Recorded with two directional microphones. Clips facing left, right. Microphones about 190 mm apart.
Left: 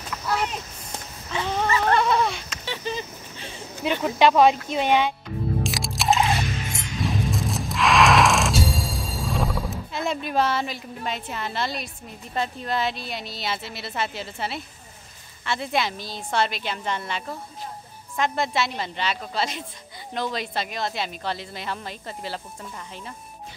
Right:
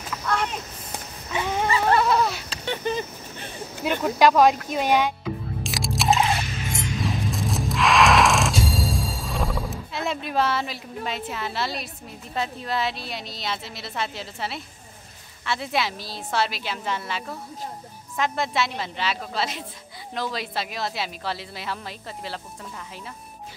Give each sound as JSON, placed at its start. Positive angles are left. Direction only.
{"t": 0.1, "sound": "a sound", "side_deg": 0}
{"t": 1.3, "sound": "dog", "side_deg": -15}
{"t": 2.6, "sound": "a sound", "side_deg": -50}
{"t": 4.0, "sound": "a woman's voice", "side_deg": 0}
{"t": 5.6, "sound": "music", "side_deg": 0}
{"t": 12.4, "sound": "a woman's voice", "side_deg": 0}